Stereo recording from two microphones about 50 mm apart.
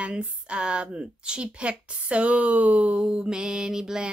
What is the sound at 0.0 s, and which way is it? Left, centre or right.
Speech, right.